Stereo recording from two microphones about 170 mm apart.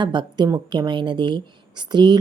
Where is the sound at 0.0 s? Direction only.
25° right (ahead or behind).